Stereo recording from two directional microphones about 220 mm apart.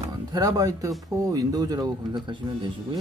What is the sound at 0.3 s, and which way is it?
Speech, 15° right (ahead or behind).